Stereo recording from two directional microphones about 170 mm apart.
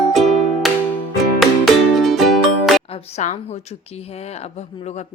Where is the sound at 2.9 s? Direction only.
35° left (ahead or behind).